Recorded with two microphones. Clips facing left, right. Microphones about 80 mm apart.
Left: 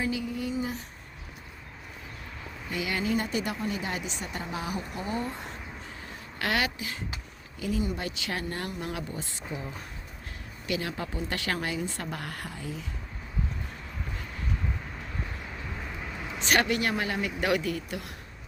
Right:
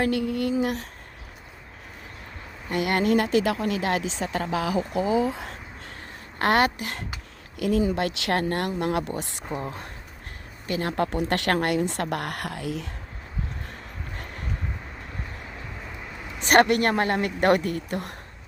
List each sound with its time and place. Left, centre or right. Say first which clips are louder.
0.0 s speech: right 7 dB; right
2.6 s speech: right 7 dB; right
6.4 s a woman's voice: right 8 dB; right
7.6 s speech: right 8 dB; right
10.7 s speech: right 6 dB; right
16.4 s a woman's voice: right 7 dB; right